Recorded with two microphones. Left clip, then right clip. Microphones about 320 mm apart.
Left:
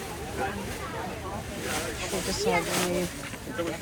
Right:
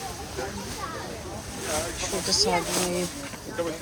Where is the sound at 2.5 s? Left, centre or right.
Centre.